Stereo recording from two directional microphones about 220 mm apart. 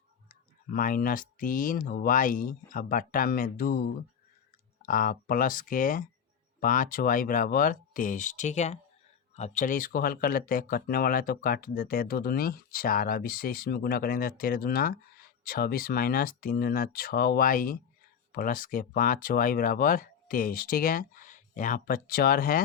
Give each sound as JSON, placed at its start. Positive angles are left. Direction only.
{"t": 0.3, "sound": "speech", "side_deg": 40}